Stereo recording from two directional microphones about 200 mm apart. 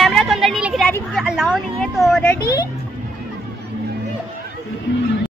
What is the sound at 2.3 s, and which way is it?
Speech, 20° left (ahead or behind).